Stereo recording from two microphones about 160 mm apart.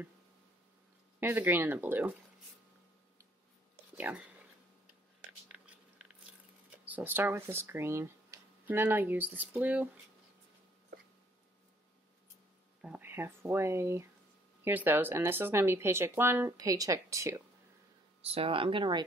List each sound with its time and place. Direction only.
1.2 s speech: 15° right (ahead or behind)
3.9 s speech: 10° right (ahead or behind)
5.5 s biting: 5° right (ahead or behind)
6.9 s speech: 10° right (ahead or behind)
12.8 s speech: 10° right (ahead or behind)
18.2 s speech: 35° right (ahead or behind)